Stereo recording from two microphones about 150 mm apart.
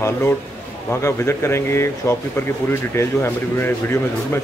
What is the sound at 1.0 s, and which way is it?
Speech, 15° left (ahead or behind).